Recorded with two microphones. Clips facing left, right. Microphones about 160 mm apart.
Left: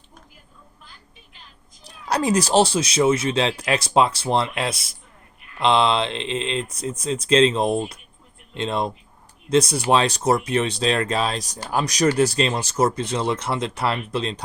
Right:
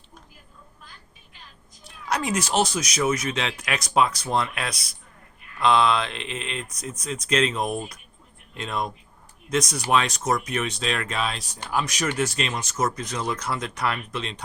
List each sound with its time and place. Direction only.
1.8 s speech: 35° left (ahead or behind)